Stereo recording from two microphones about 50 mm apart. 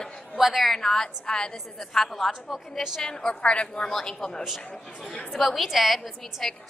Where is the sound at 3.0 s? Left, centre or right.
Centre.